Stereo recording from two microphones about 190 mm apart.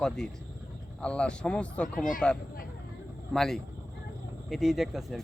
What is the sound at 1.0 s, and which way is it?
Speech, 5° left (ahead or behind).